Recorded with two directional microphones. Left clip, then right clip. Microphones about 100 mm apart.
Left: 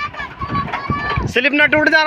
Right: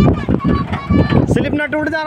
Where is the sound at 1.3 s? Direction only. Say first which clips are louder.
Left 4 dB; 35° right (ahead or behind).